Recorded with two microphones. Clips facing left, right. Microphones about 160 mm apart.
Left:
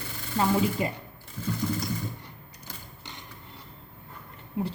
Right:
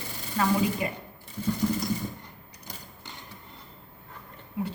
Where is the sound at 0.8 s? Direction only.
30° left (ahead or behind).